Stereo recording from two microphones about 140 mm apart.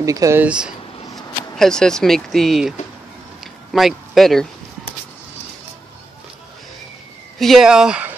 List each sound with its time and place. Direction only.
0.0 s speech: 25° right (ahead or behind)
0.4 s speech: 5° right (ahead or behind)
3.7 s speech: centre (ahead or behind)
7.3 s speech: centre (ahead or behind)